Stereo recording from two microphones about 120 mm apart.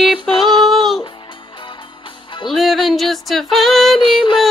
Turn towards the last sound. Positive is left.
turn(degrees=45)  # may be behind; listen again after turning